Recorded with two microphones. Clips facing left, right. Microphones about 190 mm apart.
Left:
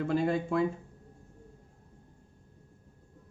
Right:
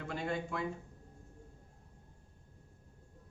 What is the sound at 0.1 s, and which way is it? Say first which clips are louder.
Speech: left 8 dB; 30° left (ahead or behind).